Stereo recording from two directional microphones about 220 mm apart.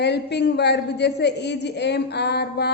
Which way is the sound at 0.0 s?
50° left (ahead or behind).